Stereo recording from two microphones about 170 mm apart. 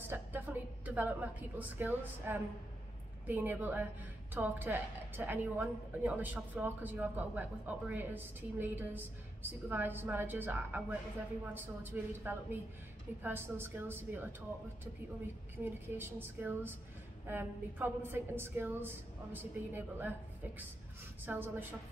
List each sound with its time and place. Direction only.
0.1 s a sound: 10° right (ahead or behind)
1.6 s a woman's voice: 10° right (ahead or behind)
15.6 s a woman's voice: 10° right (ahead or behind)